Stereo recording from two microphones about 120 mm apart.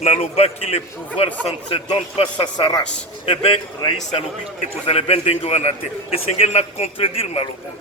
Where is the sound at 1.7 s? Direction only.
45° left (ahead or behind).